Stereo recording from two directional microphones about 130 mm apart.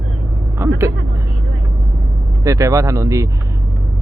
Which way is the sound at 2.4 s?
25° right (ahead or behind).